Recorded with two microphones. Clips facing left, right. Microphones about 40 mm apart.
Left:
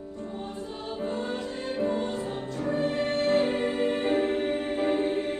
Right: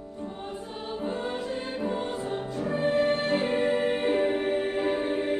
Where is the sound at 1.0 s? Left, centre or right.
Centre.